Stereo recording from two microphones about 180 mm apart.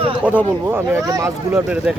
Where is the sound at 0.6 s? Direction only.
15° right (ahead or behind).